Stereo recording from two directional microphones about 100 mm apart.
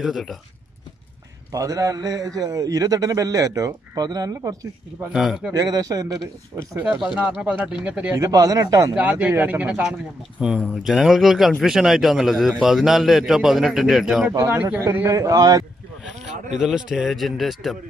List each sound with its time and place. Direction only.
0.0 s speech: centre (ahead or behind)
1.5 s a man's voice: 35° right (ahead or behind)
5.1 s speech: 5° right (ahead or behind)
5.5 s a man's voice: 35° right (ahead or behind)
7.2 s speech: 15° right (ahead or behind)
8.2 s a man's voice: 35° right (ahead or behind)
8.9 s speech: 15° right (ahead or behind)
14.3 s a man's voice: 25° right (ahead or behind)
16.5 s speech: 5° right (ahead or behind)